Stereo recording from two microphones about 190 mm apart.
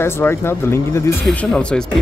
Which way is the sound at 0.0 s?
15° left (ahead or behind).